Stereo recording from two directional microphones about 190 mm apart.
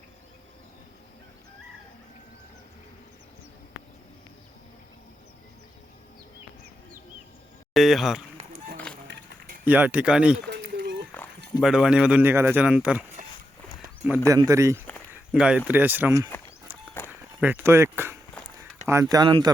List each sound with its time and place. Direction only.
7.7 s speech: centre (ahead or behind)
9.6 s speech: 10° right (ahead or behind)
10.5 s a sound: 60° right (ahead or behind)
11.6 s speech: 5° right (ahead or behind)
14.3 s speech: 15° right (ahead or behind)
15.1 s speech: 5° right (ahead or behind)
17.1 s a sound: 10° right (ahead or behind)
18.9 s speech: 15° right (ahead or behind)